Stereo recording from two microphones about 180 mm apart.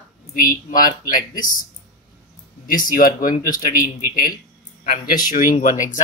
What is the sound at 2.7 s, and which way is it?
Speech, 50° left (ahead or behind).